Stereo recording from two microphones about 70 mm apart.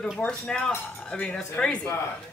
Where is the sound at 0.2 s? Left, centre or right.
Centre.